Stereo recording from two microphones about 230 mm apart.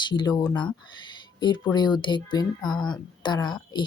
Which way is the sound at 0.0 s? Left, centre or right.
Centre.